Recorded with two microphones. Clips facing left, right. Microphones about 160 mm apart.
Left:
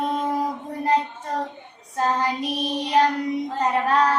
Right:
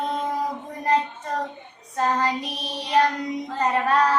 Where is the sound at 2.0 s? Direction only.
10° left (ahead or behind).